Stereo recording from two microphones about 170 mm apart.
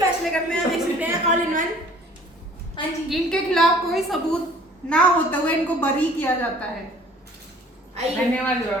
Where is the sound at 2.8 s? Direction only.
30° left (ahead or behind).